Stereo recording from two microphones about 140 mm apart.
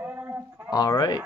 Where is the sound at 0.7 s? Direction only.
30° left (ahead or behind).